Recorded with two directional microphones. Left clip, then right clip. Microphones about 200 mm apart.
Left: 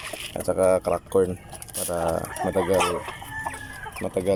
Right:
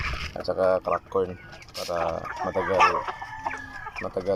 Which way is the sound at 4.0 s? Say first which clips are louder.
Left 3 dB; 15° left (ahead or behind).